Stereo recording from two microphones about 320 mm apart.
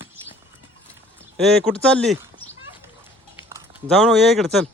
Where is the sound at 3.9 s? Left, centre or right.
Centre.